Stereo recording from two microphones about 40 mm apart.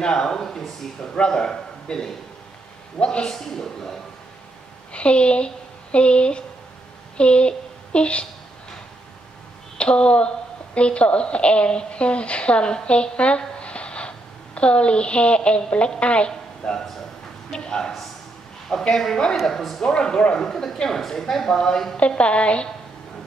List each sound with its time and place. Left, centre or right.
0.0 s speech: centre
1.1 s a man's voice: left
3.3 s speech: centre
4.9 s speech: left
9.8 s a woman's voice: left
13.6 s a sound: left
16.0 s a woman's voice: left; by 19.8 s centre
19.8 s a woman's voice: left
20.3 s speech: centre
21.9 s a woman's voice: left